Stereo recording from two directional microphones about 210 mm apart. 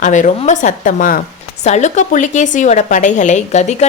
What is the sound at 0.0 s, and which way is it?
A woman's voice, 35° left (ahead or behind).